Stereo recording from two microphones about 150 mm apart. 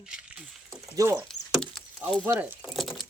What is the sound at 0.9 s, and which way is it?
Speech, 20° right (ahead or behind).